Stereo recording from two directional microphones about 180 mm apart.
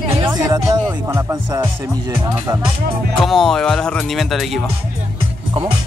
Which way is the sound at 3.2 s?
Centre (ahead or behind).